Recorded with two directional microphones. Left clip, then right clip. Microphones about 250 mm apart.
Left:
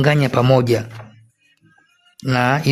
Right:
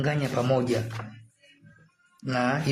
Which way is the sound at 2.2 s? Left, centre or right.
Left.